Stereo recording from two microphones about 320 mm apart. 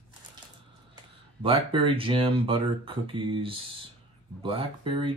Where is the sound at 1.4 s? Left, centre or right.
Centre.